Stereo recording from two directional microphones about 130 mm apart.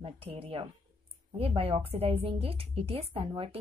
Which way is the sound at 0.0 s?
50° right (ahead or behind).